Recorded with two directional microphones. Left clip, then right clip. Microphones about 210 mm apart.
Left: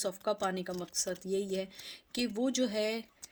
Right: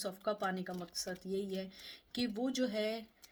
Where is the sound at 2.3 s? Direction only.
40° left (ahead or behind).